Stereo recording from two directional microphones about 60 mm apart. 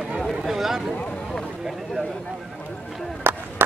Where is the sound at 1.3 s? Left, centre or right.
Centre.